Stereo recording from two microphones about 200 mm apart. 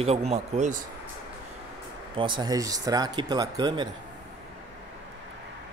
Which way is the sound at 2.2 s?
25° right (ahead or behind).